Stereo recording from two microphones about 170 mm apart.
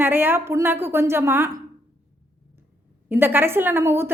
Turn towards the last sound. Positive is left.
turn(degrees=-15)  # may be behind; listen again after turning